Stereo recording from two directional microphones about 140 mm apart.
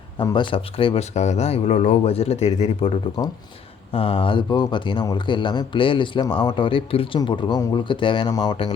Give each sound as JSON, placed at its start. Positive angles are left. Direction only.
{"t": 0.2, "sound": "speech", "side_deg": 35}
{"t": 1.1, "sound": "speech", "side_deg": 55}